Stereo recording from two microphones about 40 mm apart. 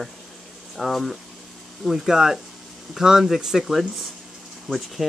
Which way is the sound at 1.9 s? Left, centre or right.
Centre.